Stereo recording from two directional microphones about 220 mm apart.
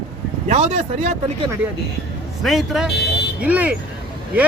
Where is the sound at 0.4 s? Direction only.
30° right (ahead or behind).